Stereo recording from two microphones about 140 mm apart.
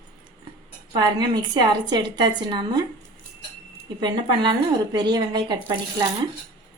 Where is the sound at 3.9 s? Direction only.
35° right (ahead or behind).